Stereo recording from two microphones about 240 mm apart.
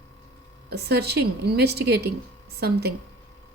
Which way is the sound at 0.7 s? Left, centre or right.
Right.